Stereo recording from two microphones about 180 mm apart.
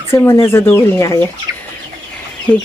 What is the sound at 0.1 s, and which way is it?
Speech, 15° left (ahead or behind).